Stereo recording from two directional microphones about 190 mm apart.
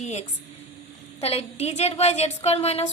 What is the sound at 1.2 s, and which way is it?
A woman's voice, 30° left (ahead or behind).